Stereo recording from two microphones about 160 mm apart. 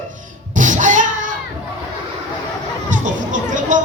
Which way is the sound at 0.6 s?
55° right (ahead or behind).